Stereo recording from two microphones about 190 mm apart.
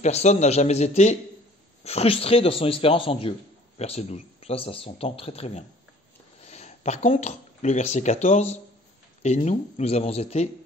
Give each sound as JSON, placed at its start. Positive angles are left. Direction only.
{"t": 0.0, "sound": "a man's voice", "side_deg": 35}